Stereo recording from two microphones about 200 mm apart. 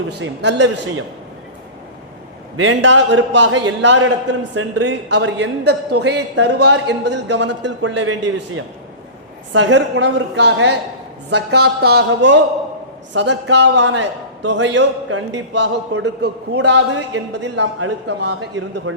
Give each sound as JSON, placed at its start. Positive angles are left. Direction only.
{"t": 0.2, "sound": "a man's voice", "side_deg": -65}
{"t": 2.6, "sound": "a man's voice", "side_deg": -70}
{"t": 9.5, "sound": "a man's voice", "side_deg": -65}